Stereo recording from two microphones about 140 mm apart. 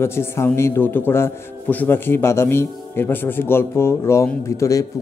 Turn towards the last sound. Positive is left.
turn(degrees=20)  # may be behind; listen again after turning